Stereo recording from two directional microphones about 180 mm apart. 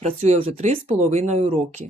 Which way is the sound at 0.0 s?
40° right (ahead or behind).